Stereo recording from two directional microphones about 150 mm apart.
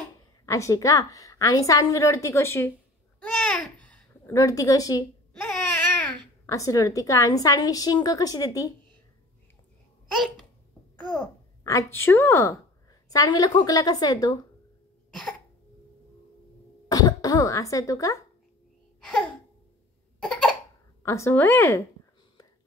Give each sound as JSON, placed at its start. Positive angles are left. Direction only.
{"t": 0.5, "sound": "a woman's voice", "side_deg": 20}
{"t": 3.2, "sound": "babbling", "side_deg": 10}
{"t": 4.3, "sound": "a woman's voice", "side_deg": 20}
{"t": 5.3, "sound": "babbling", "side_deg": 5}
{"t": 6.4, "sound": "a woman's voice", "side_deg": 20}
{"t": 11.1, "sound": "a woman's voice", "side_deg": 20}
{"t": 16.9, "sound": "speech", "side_deg": 25}
{"t": 20.2, "sound": "cough", "side_deg": 0}
{"t": 21.0, "sound": "speech", "side_deg": 20}